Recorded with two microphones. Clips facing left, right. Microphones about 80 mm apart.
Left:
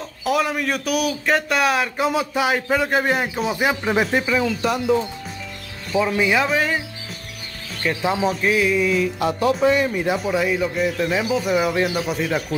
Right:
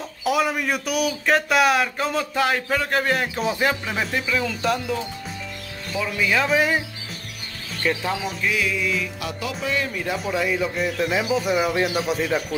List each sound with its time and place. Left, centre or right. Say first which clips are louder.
0.2 s speech: left 1 dB; centre
2.0 s a man's voice: left 2 dB; centre
3.8 s speech: left 6 dB; left
4.4 s speech: left 2 dB; centre
5.9 s speech: left 6 dB; left
6.3 s speech: right 3 dB; centre
7.8 s a man's voice: even; centre
8.2 s music: left 6 dB; left
9.7 s speech: left 7 dB; left
10.1 s speech: left 3 dB; centre